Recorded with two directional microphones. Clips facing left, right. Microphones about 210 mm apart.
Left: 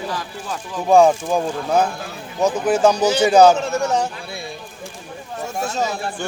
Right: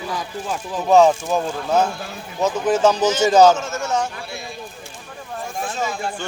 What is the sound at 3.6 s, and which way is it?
Speech, 35° left (ahead or behind).